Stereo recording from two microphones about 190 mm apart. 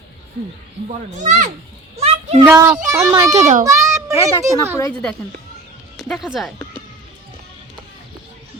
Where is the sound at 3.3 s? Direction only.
40° right (ahead or behind).